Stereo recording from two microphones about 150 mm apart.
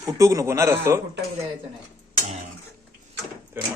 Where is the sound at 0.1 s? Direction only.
20° right (ahead or behind).